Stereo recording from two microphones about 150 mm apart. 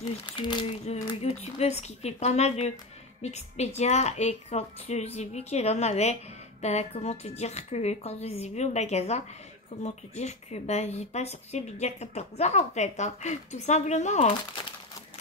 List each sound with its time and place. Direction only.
0.4 s speech: 30° left (ahead or behind)
0.8 s speech: 45° left (ahead or behind)